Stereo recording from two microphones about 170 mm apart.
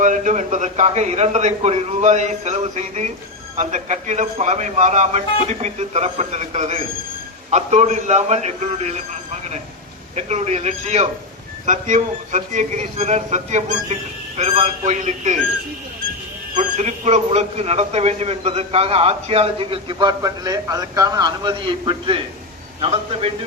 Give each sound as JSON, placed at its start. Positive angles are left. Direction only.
{"t": 0.0, "sound": "a man's voice", "side_deg": -45}
{"t": 16.6, "sound": "a man's voice", "side_deg": -40}